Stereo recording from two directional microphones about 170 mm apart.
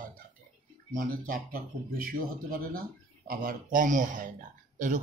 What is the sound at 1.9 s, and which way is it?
Speech, 60° right (ahead or behind).